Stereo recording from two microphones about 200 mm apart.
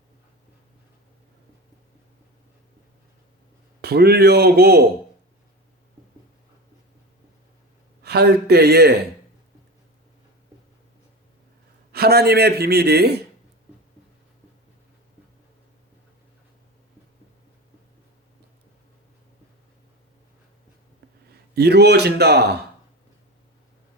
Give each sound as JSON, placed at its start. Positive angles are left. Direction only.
{"t": 3.8, "sound": "a man's voice", "side_deg": -55}
{"t": 8.0, "sound": "a man's voice", "side_deg": -55}
{"t": 11.9, "sound": "a man's voice", "side_deg": -50}
{"t": 21.5, "sound": "speech", "side_deg": -55}